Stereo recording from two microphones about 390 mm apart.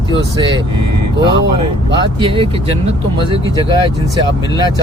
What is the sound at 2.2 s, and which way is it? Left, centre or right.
Speech, centre.